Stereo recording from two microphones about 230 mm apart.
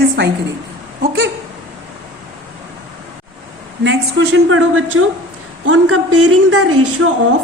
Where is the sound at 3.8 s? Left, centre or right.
Right.